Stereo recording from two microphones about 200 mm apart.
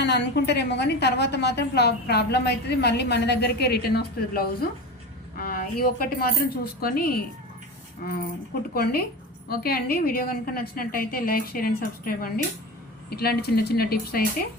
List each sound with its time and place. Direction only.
0.0 s a woman's voice: 55° left (ahead or behind)
8.7 s a woman's voice: 50° left (ahead or behind)